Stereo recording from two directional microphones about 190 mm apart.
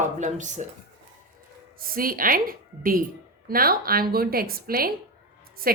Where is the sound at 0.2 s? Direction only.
40° right (ahead or behind).